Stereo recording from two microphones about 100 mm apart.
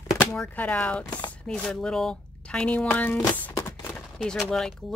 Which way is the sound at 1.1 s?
45° left (ahead or behind).